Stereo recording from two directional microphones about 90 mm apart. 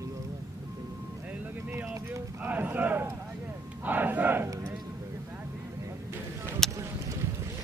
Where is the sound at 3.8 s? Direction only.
20° right (ahead or behind).